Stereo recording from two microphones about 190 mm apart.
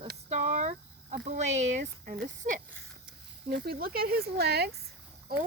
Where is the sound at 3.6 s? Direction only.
55° right (ahead or behind).